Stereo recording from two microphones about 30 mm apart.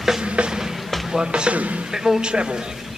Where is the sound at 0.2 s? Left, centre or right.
Right.